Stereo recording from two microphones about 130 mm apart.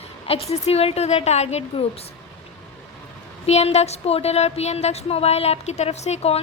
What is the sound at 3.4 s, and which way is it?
Speech, 55° left (ahead or behind).